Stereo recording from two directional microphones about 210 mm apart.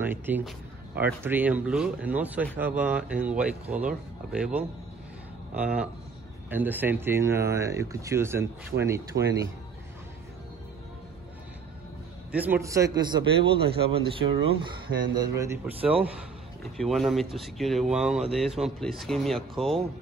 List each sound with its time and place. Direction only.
0.0 s speech: 10° right (ahead or behind)
9.1 s speech: 55° right (ahead or behind)
12.3 s a man's voice: 5° right (ahead or behind)